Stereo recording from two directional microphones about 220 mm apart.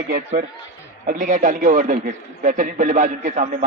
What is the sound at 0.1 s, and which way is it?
A man's voice, 35° right (ahead or behind).